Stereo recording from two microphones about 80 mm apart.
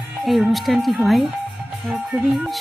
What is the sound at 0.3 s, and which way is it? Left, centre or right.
Speech, centre.